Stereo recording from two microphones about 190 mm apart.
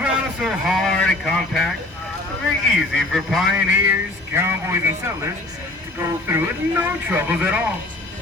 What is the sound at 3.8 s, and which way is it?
Speech, 15° right (ahead or behind).